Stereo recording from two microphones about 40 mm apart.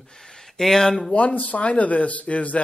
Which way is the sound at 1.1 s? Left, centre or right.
Left.